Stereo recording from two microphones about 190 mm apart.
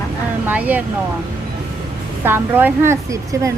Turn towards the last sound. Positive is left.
turn(degrees=-15)  # may be behind; listen again after turning